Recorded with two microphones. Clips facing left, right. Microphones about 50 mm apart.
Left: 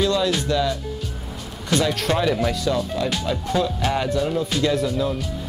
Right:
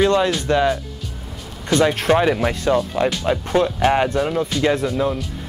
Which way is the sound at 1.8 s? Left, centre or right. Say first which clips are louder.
Right 6 dB; right.